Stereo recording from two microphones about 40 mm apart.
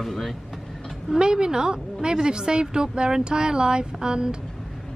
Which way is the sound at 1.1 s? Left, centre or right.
Centre.